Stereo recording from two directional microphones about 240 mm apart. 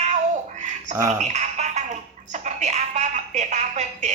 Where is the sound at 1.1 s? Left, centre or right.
Right.